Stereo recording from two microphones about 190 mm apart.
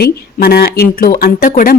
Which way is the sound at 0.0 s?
55° left (ahead or behind).